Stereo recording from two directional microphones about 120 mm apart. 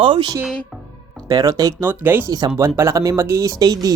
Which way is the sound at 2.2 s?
35° right (ahead or behind).